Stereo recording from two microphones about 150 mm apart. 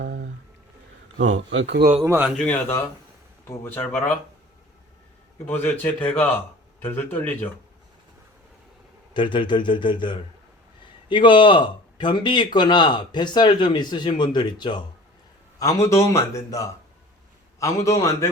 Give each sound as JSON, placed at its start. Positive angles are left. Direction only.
{"t": 2.0, "sound": "a man's voice", "side_deg": -10}
{"t": 2.4, "sound": "speech", "side_deg": 15}
{"t": 5.5, "sound": "speech", "side_deg": 10}
{"t": 9.1, "sound": "a man's voice", "side_deg": 30}